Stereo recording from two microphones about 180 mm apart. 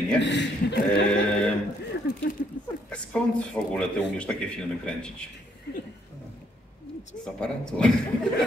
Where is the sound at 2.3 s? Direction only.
75° left (ahead or behind).